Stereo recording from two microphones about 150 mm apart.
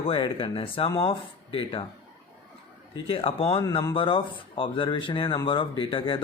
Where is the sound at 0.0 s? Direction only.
35° left (ahead or behind).